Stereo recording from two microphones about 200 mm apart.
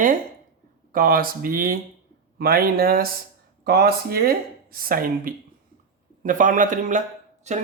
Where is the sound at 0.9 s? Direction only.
45° right (ahead or behind).